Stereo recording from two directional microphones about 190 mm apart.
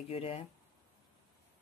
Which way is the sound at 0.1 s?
30° left (ahead or behind).